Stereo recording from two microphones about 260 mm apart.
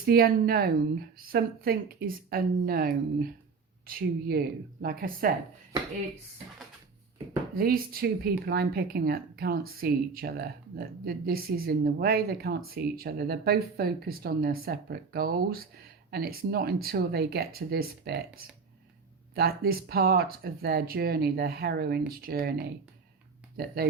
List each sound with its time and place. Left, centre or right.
0.0 s speech: right
7.5 s speech: right
19.3 s speech: right